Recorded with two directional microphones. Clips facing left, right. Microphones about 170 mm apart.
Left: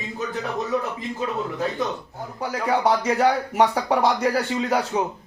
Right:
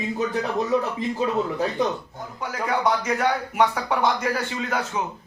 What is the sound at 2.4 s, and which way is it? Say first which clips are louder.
Speech: left 3 dB; 35° left (ahead or behind).